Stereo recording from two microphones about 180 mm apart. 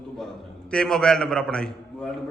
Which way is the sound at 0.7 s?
5° left (ahead or behind).